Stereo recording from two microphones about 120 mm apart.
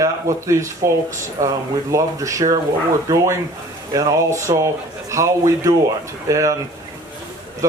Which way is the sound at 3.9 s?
25° right (ahead or behind).